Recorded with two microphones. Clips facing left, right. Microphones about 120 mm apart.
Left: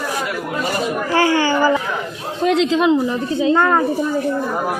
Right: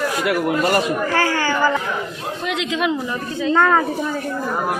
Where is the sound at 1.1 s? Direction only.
20° left (ahead or behind).